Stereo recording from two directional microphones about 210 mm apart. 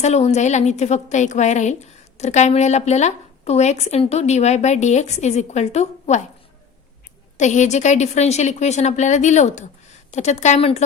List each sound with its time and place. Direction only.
0.0 s a woman's voice: 30° left (ahead or behind)
7.3 s a woman's voice: 35° left (ahead or behind)